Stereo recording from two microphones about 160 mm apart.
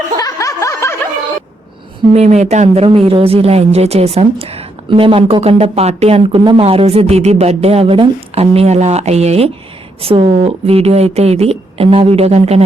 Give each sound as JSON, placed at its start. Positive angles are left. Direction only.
{"t": 0.2, "sound": "snicker", "side_deg": 20}
{"t": 2.1, "sound": "speech", "side_deg": -45}